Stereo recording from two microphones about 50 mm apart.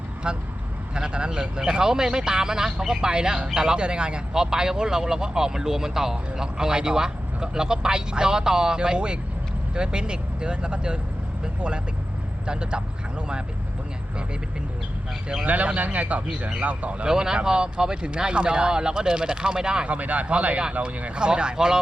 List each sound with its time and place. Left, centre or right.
0.2 s a man's voice: centre
12.5 s a man's voice: centre
15.4 s a man's voice: right
17.1 s speech: centre
19.9 s a man's voice: right